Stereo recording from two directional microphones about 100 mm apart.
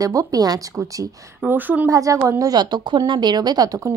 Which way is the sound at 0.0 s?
35° right (ahead or behind).